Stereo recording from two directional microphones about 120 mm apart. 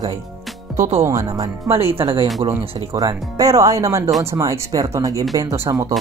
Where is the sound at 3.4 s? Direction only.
30° right (ahead or behind).